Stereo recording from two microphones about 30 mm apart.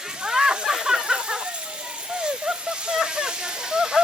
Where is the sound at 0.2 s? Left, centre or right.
Right.